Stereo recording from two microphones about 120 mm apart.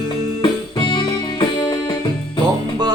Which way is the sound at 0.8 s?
40° left (ahead or behind).